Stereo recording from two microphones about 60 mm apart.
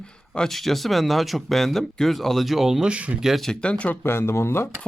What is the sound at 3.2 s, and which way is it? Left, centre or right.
Speech, centre.